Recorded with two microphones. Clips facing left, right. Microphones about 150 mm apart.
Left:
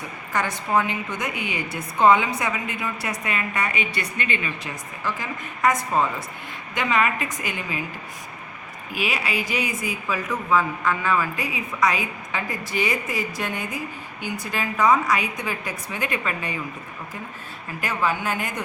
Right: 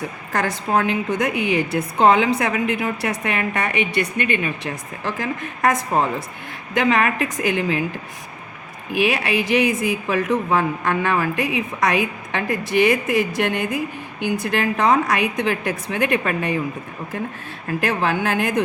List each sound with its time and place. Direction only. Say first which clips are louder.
0.7 s a woman's voice: right 3 dB; 70° right (ahead or behind)
1.2 s a woman's voice: right 9 dB; 90° right
3.2 s speech: right 2 dB; 60° right (ahead or behind)
5.1 s a woman's voice: right 6 dB; 70° right (ahead or behind)
6.7 s a woman's voice: right 5 dB; 75° right (ahead or behind)
8.9 s a woman's voice: right 7 dB; 65° right (ahead or behind)
17.7 s a woman's voice: right 4 dB; 70° right (ahead or behind)